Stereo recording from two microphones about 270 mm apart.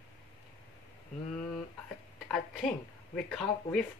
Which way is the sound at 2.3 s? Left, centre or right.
Centre.